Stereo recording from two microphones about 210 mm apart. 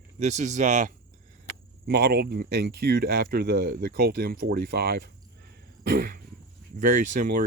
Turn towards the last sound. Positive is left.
turn(degrees=-40)  # may be behind; listen again after turning